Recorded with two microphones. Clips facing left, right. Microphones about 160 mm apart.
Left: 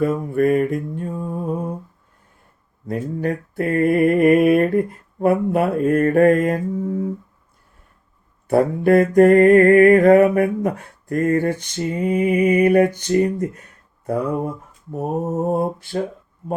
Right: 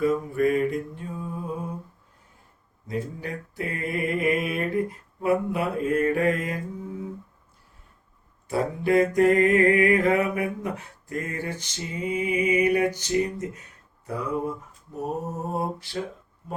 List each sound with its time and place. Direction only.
0.0 s mantra: 55° left (ahead or behind)
2.8 s mantra: 55° left (ahead or behind)
8.4 s mantra: 55° left (ahead or behind)
14.1 s a sound: 55° left (ahead or behind)
14.9 s mantra: 50° left (ahead or behind)